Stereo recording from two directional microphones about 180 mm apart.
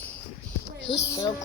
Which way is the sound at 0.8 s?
85° left.